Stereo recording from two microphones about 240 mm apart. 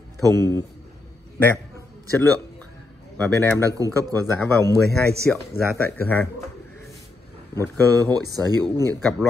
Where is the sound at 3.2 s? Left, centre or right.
Centre.